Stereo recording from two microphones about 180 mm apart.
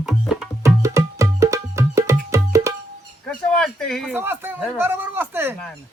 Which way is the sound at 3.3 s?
5° left (ahead or behind).